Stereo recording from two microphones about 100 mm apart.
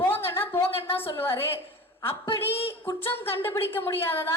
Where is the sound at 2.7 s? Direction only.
20° left (ahead or behind).